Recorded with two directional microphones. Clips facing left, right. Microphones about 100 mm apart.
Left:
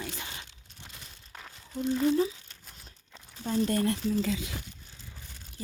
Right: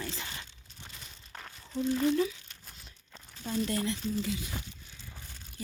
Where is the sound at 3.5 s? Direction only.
40° left (ahead or behind).